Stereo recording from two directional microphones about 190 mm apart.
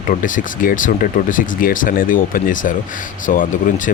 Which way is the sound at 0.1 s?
45° left (ahead or behind).